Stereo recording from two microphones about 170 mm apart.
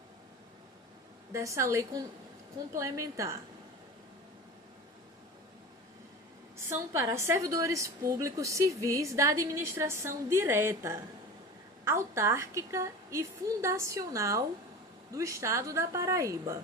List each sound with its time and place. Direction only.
1.3 s a woman's voice: 15° right (ahead or behind)
6.7 s a woman's voice: 15° right (ahead or behind)